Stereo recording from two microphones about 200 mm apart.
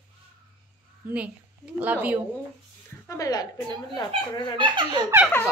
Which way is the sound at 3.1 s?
20° left (ahead or behind).